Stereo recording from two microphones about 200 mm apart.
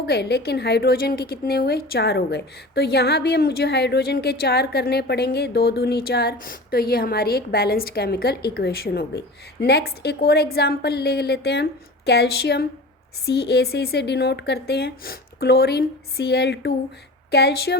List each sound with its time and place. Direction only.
0.1 s a woman's voice: 55° left (ahead or behind)